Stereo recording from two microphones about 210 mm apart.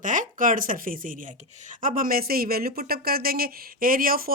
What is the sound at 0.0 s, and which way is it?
Speech, 40° right (ahead or behind).